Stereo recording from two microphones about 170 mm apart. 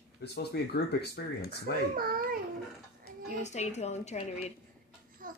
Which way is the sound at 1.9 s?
60° right (ahead or behind).